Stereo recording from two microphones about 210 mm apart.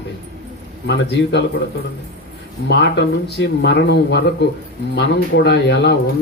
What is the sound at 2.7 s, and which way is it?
Speech, 55° left (ahead or behind).